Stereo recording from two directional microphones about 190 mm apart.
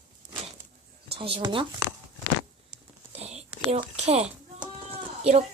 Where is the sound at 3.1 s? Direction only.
35° right (ahead or behind).